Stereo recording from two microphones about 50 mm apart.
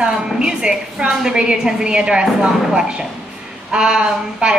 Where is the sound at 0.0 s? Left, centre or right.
Centre.